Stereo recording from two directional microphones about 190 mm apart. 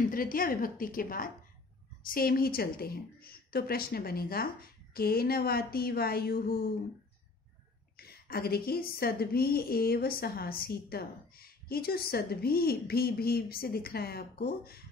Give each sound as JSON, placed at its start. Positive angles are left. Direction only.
{"t": 0.1, "sound": "a woman's voice", "side_deg": 50}
{"t": 8.0, "sound": "a woman's voice", "side_deg": 55}